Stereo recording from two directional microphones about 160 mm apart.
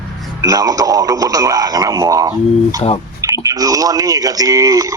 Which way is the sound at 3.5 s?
20° right (ahead or behind).